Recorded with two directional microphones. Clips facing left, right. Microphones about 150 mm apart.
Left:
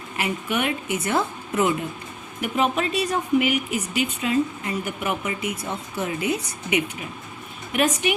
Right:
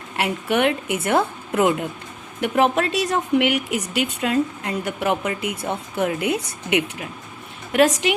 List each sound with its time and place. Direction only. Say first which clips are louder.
0.2 s a woman's voice: right 5 dB; 70° right (ahead or behind)
2.4 s speech: right 4 dB; 75° right (ahead or behind)
7.7 s a woman's voice: right 5 dB; 90° right